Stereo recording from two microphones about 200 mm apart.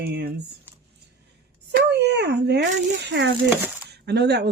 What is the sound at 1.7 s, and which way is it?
Speech, 55° right (ahead or behind).